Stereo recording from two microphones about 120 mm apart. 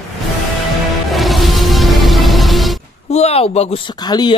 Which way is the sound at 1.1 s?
Centre (ahead or behind).